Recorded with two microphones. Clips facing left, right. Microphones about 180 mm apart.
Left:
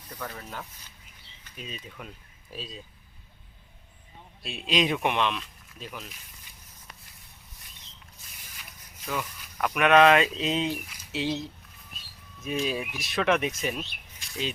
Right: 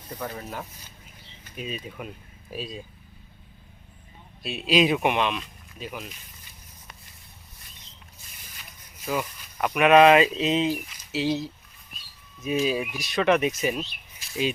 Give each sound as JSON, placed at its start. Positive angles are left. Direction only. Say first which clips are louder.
{"t": 0.2, "sound": "speech", "louder": "right 4 dB", "side_deg": -20}
{"t": 1.5, "sound": "speech", "louder": "right 7 dB", "side_deg": -15}
{"t": 4.4, "sound": "speech", "louder": "right 5 dB", "side_deg": -5}
{"t": 9.0, "sound": "speech", "louder": "right 4 dB", "side_deg": -5}
{"t": 14.2, "sound": "bird", "louder": "right 6 dB", "side_deg": -5}